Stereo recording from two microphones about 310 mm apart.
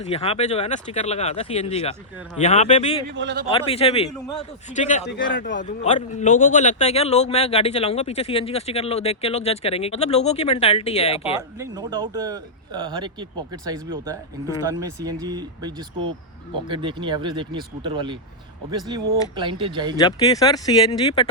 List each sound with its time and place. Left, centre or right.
0.1 s a man's voice: centre
3.2 s speech: right
3.5 s a man's voice: centre
5.0 s a man's voice: left
5.6 s a man's voice: left
11.3 s speech: centre
20.0 s speech: centre